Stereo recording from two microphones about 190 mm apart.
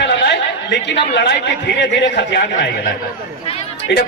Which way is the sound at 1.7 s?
60° left (ahead or behind).